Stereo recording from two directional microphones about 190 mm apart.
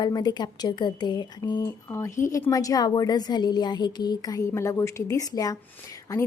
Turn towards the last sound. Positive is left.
turn(degrees=20)  # may be behind; listen again after turning